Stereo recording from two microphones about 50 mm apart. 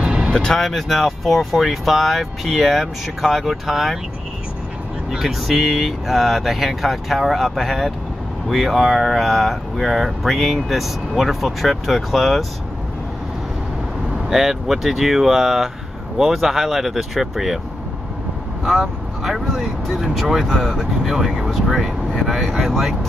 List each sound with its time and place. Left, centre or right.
0.0 s vehicle: centre
0.3 s speech: centre
5.2 s speech: centre
14.3 s speech: centre
18.6 s speech: centre